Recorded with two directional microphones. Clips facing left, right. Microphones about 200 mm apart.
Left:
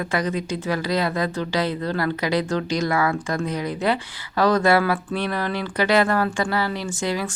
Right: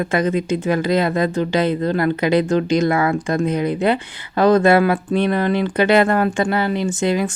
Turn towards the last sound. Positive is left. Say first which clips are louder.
# right 7 dB
turn(degrees=-20)  # may be behind; listen again after turning